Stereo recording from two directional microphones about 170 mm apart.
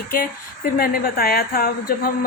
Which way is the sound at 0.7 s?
60° left (ahead or behind).